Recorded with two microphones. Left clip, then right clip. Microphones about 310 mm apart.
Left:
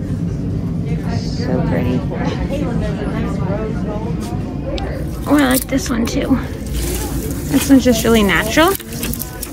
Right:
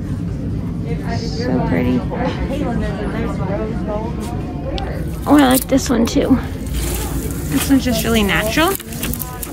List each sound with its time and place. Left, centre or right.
1.4 s speech: centre
5.3 s speech: centre
7.7 s speech: centre